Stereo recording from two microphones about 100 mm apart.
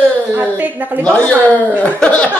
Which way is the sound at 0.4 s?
15° right (ahead or behind).